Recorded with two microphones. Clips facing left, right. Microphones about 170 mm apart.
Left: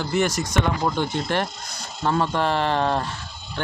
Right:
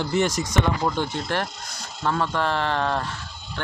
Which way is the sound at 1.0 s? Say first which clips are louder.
Left 2 dB; 20° left (ahead or behind).